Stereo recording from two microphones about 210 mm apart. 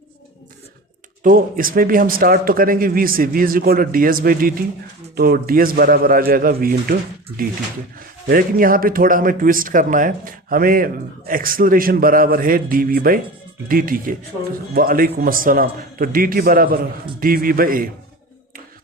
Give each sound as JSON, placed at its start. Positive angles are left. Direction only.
{"t": 1.2, "sound": "speech", "side_deg": -40}